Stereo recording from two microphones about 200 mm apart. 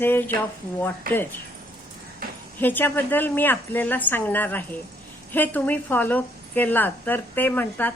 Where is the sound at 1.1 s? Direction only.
45° right (ahead or behind).